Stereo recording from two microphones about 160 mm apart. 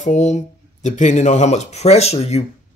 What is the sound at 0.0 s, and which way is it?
Speech, 45° left (ahead or behind).